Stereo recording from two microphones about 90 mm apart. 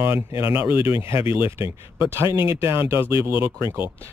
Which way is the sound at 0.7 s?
85° left.